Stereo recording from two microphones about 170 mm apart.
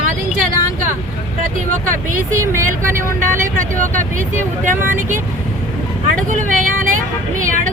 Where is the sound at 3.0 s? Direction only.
15° right (ahead or behind).